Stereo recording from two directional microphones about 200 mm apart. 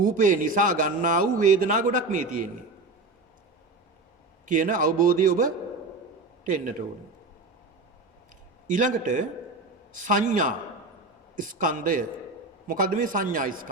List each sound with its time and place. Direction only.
0.0 s a man's voice: 40° right (ahead or behind)
4.4 s a man's voice: 40° right (ahead or behind)
8.6 s a man's voice: 40° right (ahead or behind)